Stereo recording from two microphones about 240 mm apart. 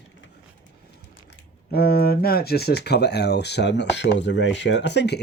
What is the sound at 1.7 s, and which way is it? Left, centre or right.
Speech, left.